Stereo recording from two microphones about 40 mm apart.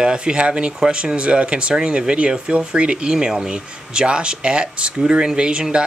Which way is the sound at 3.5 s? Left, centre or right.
Right.